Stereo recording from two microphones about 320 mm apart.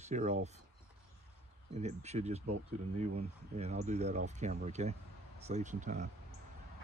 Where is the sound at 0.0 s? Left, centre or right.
Right.